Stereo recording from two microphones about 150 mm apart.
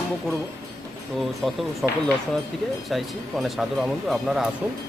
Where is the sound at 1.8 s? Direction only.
Centre (ahead or behind).